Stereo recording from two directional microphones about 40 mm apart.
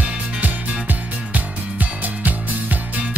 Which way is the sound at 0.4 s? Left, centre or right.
Right.